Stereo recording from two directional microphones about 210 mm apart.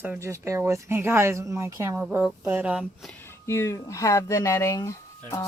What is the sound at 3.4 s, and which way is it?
Speech, 15° left (ahead or behind).